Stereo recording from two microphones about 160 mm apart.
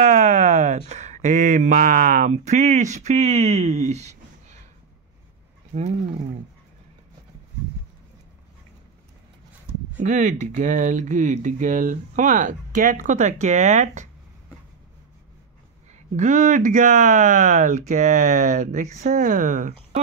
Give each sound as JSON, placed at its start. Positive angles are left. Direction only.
{"t": 0.0, "sound": "speech", "side_deg": -45}
{"t": 5.7, "sound": "speech", "side_deg": -45}
{"t": 9.9, "sound": "speech", "side_deg": -50}
{"t": 16.2, "sound": "speech", "side_deg": -50}